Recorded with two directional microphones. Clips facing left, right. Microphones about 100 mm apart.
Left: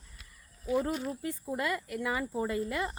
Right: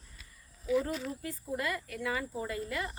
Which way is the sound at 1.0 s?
25° left (ahead or behind).